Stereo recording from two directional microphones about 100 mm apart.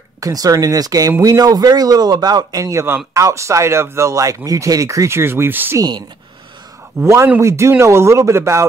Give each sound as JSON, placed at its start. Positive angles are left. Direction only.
{"t": 0.2, "sound": "a man's voice", "side_deg": -40}
{"t": 7.0, "sound": "speech", "side_deg": -25}